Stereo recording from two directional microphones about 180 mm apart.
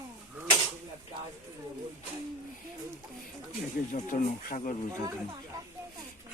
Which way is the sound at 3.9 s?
45° left (ahead or behind).